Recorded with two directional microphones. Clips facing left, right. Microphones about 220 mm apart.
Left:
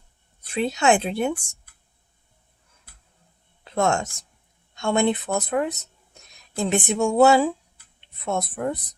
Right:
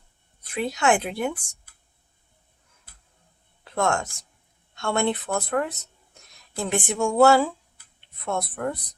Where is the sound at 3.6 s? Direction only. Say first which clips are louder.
Left 2 dB; 20° left (ahead or behind).